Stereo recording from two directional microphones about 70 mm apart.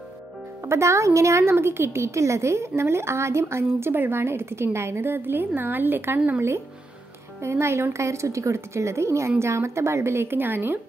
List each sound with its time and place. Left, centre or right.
0.7 s a woman's voice: right
7.4 s a woman's voice: right